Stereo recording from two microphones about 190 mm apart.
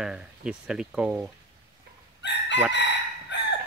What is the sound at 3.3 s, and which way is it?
Chicken, 65° left (ahead or behind).